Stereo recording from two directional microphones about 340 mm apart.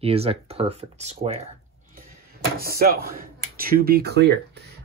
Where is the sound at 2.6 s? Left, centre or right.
Right.